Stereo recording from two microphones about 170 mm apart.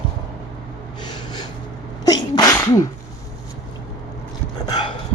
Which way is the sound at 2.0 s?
25° left (ahead or behind).